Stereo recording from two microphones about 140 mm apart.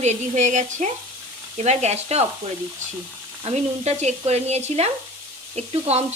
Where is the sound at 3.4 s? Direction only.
50° right (ahead or behind).